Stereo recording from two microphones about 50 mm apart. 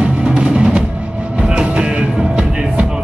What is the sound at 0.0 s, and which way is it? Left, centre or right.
Music, right.